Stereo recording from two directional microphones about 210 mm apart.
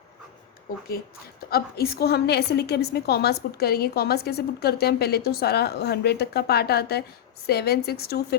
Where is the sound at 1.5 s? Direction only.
45° left (ahead or behind).